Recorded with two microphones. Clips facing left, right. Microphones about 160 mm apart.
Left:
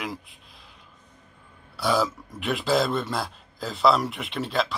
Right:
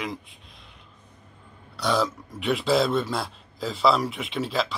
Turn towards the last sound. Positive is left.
turn(degrees=0)  # may be behind; listen again after turning